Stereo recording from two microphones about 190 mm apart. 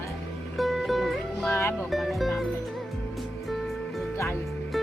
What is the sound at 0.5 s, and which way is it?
Music, centre (ahead or behind).